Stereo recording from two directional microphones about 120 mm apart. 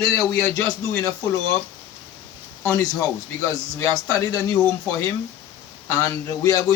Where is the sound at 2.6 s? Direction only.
30° left (ahead or behind).